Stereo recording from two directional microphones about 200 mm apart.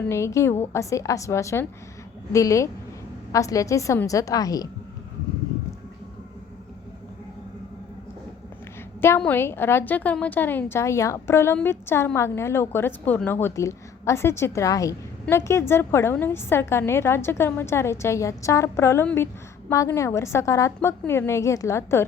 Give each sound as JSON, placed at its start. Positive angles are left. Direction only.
{"t": 0.1, "sound": "a woman's voice", "side_deg": 15}
{"t": 9.0, "sound": "a woman's voice", "side_deg": 10}